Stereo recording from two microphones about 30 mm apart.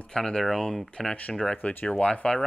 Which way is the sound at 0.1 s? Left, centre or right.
Left.